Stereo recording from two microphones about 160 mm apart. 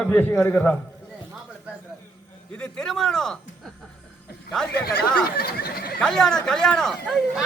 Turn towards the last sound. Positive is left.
turn(degrees=0)  # may be behind; listen again after turning